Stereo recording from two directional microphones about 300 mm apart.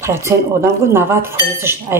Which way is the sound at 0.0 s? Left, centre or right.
Centre.